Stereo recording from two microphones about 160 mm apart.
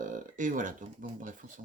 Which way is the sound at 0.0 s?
55° right (ahead or behind).